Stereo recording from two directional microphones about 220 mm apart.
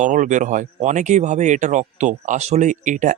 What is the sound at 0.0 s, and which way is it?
Speech, 35° right (ahead or behind).